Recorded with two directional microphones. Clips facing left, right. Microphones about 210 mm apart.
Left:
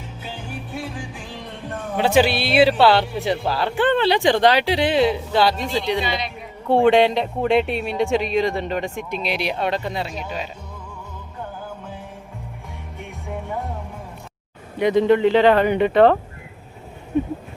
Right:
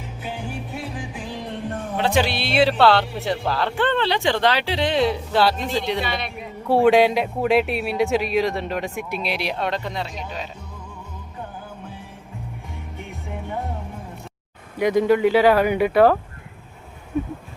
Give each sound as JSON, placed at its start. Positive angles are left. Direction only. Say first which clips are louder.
{"t": 2.0, "sound": "a man's voice", "louder": "left 4 dB", "side_deg": 5}
{"t": 6.0, "sound": "speech", "louder": "left 2 dB", "side_deg": -55}
{"t": 6.7, "sound": "a man's voice", "louder": "even", "side_deg": -5}
{"t": 14.8, "sound": "speech", "louder": "left 1 dB", "side_deg": -10}